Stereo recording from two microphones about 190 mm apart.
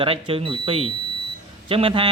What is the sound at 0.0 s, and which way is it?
Speech, 30° right (ahead or behind).